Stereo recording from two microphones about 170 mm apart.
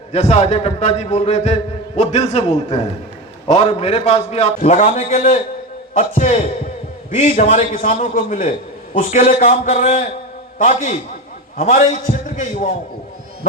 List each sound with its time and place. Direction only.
0.1 s a man's voice: 40° left (ahead or behind)